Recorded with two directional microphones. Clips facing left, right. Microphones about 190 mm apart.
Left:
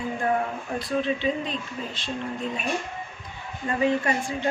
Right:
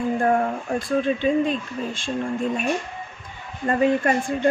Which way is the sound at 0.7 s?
50° right (ahead or behind).